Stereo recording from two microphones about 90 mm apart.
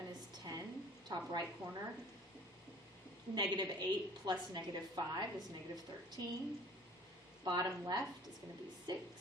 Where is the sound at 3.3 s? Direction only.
50° right (ahead or behind).